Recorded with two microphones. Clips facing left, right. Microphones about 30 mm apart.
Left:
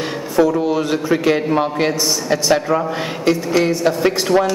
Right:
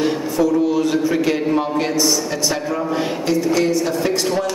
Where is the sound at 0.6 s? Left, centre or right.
Centre.